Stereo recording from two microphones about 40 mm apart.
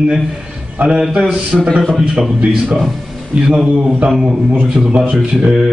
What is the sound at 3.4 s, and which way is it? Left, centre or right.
Speech, right.